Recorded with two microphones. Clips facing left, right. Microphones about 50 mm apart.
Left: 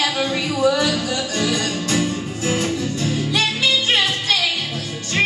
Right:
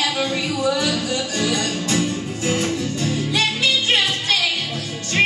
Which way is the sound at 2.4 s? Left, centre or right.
Centre.